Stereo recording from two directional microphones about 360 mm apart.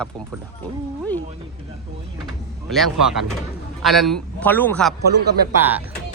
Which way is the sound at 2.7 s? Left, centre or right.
Centre.